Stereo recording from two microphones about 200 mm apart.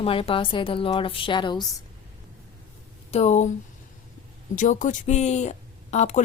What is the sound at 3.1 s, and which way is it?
Speech, 35° left (ahead or behind).